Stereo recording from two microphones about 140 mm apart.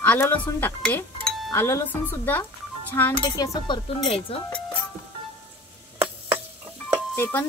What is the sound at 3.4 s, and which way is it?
Speech, 35° left (ahead or behind).